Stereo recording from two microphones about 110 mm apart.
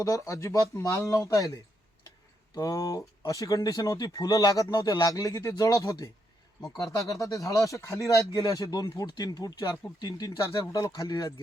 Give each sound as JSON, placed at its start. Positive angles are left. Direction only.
{"t": 0.0, "sound": "speech", "side_deg": 30}
{"t": 2.6, "sound": "speech", "side_deg": 35}